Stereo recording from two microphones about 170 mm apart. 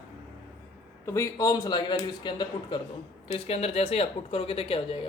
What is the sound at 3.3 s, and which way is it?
Speech, 35° left (ahead or behind).